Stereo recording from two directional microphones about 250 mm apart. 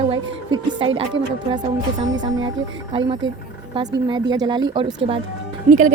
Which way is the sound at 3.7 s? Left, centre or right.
Centre.